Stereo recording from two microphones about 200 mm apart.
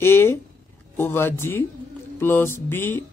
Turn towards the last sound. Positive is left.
turn(degrees=10)  # may be behind; listen again after turning